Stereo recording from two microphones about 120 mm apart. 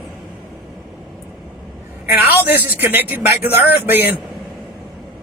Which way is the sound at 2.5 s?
15° right (ahead or behind).